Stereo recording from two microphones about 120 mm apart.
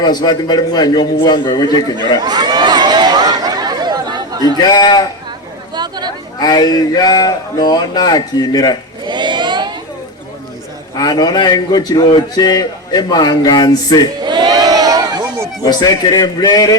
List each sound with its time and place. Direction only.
0.0 s a man's voice: 35° left (ahead or behind)
2.0 s chatter: 35° right (ahead or behind)
4.7 s a man's voice: 35° left (ahead or behind)
5.7 s chatter: 35° right (ahead or behind)
6.4 s a man's voice: 35° left (ahead or behind)
9.0 s a sound: 40° right (ahead or behind)
10.9 s a man's voice: 35° left (ahead or behind)
14.3 s crowd: 35° right (ahead or behind)
15.6 s a man's voice: 30° left (ahead or behind)